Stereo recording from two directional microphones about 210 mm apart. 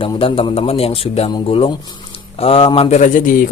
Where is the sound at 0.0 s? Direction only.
25° left (ahead or behind).